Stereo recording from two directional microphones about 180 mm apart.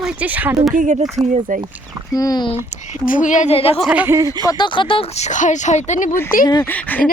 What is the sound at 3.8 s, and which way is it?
Speech, 5° right (ahead or behind).